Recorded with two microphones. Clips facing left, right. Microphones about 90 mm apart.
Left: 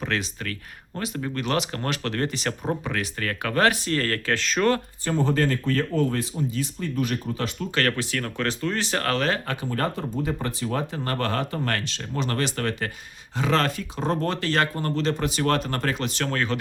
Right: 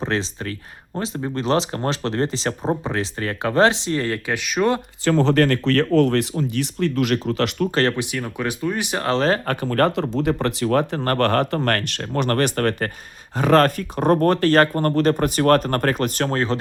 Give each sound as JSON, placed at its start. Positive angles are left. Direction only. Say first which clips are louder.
{"t": 0.0, "sound": "speech", "louder": "right 4 dB", "side_deg": -30}
{"t": 5.0, "sound": "speech", "louder": "right 7 dB", "side_deg": -90}
{"t": 7.7, "sound": "speech", "louder": "right 1 dB", "side_deg": -30}
{"t": 7.9, "sound": "speech", "louder": "right 2 dB", "side_deg": -15}
{"t": 9.1, "sound": "speech", "louder": "right 8 dB", "side_deg": -35}
{"t": 9.5, "sound": "speech", "louder": "right 8 dB", "side_deg": -60}
{"t": 16.3, "sound": "speech", "louder": "right 4 dB", "side_deg": -30}